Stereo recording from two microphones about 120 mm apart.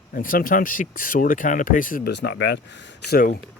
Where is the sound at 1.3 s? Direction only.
90° left.